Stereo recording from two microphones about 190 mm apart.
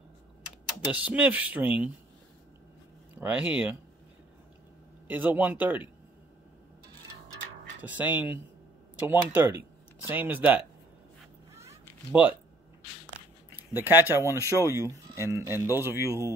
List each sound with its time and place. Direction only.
0.9 s speech: 5° right (ahead or behind)
3.2 s speech: 10° right (ahead or behind)
5.0 s speech: 10° right (ahead or behind)
7.8 s speech: 10° right (ahead or behind)
11.5 s a sound: 15° right (ahead or behind)
12.1 s speech: 10° right (ahead or behind)
13.6 s speech: 10° right (ahead or behind)